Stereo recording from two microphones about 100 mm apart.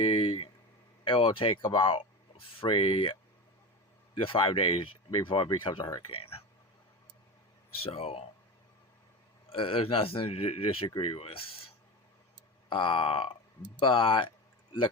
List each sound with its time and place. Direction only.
0.0 s speech: 65° left (ahead or behind)
4.2 s speech: 60° left (ahead or behind)
6.0 s speech: 70° left (ahead or behind)
7.8 s speech: 75° left (ahead or behind)
9.5 s speech: 65° left (ahead or behind)
12.6 s speech: 55° left (ahead or behind)
13.8 s a sound: 60° left (ahead or behind)